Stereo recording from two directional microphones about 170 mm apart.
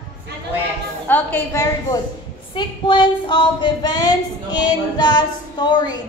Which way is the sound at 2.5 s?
25° left (ahead or behind).